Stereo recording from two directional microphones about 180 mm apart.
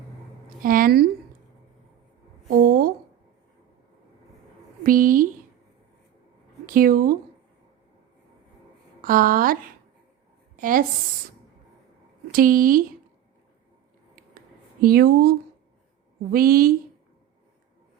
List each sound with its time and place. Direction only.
0.6 s a woman's voice: 50° right (ahead or behind)
2.5 s a sound: 50° right (ahead or behind)
4.8 s a sound: 50° right (ahead or behind)
6.7 s a woman's voice: 50° right (ahead or behind)
9.0 s speech: 50° right (ahead or behind)
10.6 s a woman's voice: 50° right (ahead or behind)
12.3 s a woman's voice: 50° right (ahead or behind)
14.8 s speech: 55° right (ahead or behind)